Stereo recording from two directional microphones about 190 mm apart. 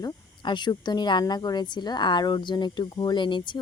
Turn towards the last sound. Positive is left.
turn(degrees=25)  # may be behind; listen again after turning